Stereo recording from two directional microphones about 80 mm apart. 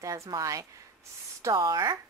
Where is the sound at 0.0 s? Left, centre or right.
Right.